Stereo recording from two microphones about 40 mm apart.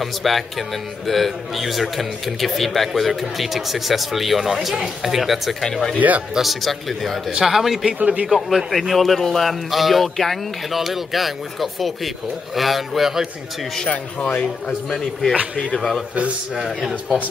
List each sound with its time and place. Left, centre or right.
0.0 s speech: centre
5.9 s speech: right
6.3 s speech: centre
8.0 s a man's voice: right
8.3 s speech: centre
13.8 s speech: left
15.5 s speech: left